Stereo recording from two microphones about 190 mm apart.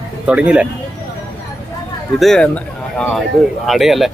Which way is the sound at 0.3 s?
5° right (ahead or behind).